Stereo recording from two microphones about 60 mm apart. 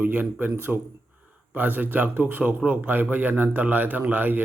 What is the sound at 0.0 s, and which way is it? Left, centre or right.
A man's voice, right.